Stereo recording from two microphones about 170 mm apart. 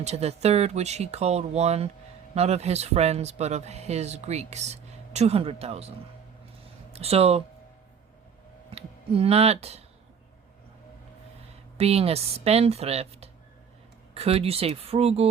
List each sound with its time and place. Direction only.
0.0 s speech: 40° right (ahead or behind)
6.9 s speech: 35° right (ahead or behind)
8.7 s speech: 35° right (ahead or behind)
11.8 s speech: 35° right (ahead or behind)